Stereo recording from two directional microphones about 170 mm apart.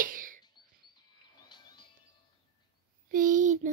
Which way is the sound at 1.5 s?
25° left (ahead or behind).